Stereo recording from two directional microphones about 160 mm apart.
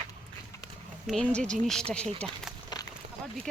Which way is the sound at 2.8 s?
25° left (ahead or behind).